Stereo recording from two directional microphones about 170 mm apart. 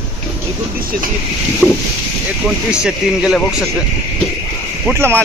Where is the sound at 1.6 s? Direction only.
10° left (ahead or behind).